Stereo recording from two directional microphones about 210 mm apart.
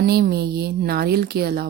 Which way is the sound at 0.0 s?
50° right (ahead or behind).